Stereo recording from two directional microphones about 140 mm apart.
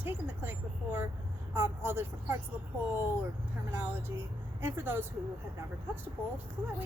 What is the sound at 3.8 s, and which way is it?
A woman's voice, 15° right (ahead or behind).